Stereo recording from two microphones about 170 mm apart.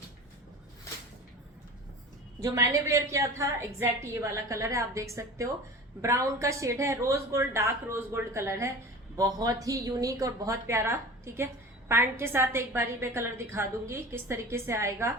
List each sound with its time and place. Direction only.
2.4 s a woman's voice: 20° right (ahead or behind)